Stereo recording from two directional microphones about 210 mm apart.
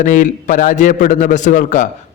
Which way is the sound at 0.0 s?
40° left (ahead or behind).